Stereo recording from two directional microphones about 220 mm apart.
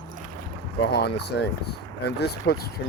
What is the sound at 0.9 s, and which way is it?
Speech, 50° left (ahead or behind).